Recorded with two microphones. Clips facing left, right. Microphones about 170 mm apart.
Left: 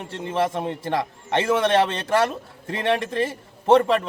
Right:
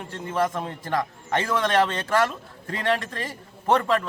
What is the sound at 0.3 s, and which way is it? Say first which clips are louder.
A man's voice: left 2 dB; 25° left (ahead or behind).